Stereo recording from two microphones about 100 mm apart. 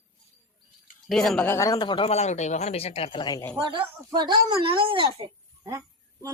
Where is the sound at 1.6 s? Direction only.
50° left (ahead or behind).